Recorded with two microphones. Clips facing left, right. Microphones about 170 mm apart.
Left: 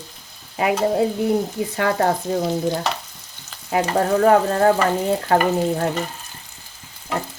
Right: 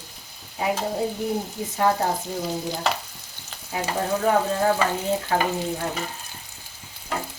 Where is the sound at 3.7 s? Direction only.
65° left (ahead or behind).